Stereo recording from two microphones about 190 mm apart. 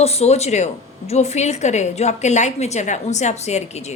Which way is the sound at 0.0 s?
35° left (ahead or behind).